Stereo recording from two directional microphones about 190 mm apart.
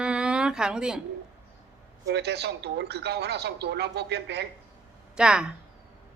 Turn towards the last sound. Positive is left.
turn(degrees=-5)  # may be behind; listen again after turning